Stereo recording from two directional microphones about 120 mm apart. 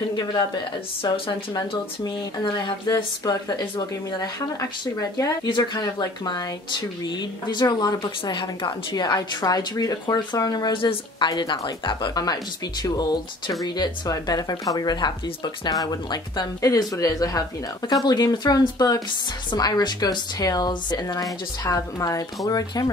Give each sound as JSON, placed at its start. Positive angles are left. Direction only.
{"t": 1.0, "sound": "speech", "side_deg": 45}